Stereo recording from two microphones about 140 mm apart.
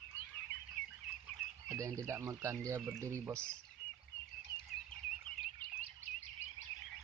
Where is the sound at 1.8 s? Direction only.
20° right (ahead or behind).